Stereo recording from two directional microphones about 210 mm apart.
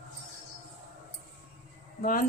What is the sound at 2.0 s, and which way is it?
Speech, 40° left (ahead or behind).